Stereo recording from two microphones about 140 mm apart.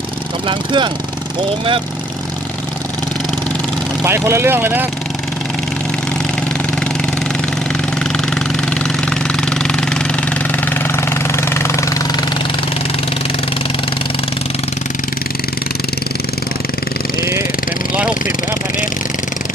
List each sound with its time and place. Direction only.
0.4 s speech: 35° right (ahead or behind)
4.0 s speech: 20° right (ahead or behind)
8.7 s engine: 5° left (ahead or behind)
10.7 s vehicle: 15° left (ahead or behind)